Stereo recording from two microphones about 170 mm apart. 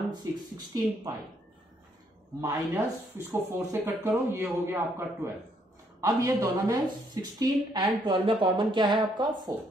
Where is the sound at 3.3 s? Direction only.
10° right (ahead or behind).